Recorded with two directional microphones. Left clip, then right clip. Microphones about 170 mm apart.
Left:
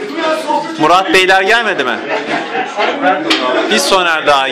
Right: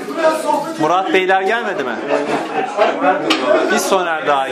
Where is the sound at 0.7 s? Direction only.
20° left (ahead or behind).